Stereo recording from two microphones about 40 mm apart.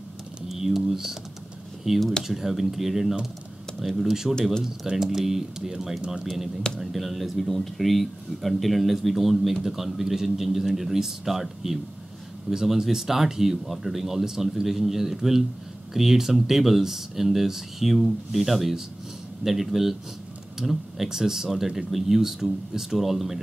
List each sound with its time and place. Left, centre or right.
0.5 s typing: centre
1.9 s speech: centre